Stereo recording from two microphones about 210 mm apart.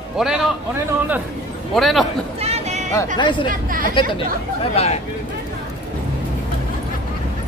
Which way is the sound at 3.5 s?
40° right (ahead or behind).